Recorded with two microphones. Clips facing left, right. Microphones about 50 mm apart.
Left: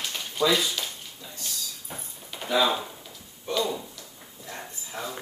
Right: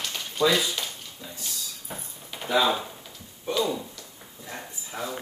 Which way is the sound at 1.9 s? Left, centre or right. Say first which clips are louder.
Right 1 dB; centre.